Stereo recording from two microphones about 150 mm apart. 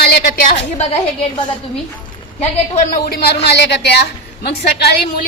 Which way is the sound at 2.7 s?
90° left.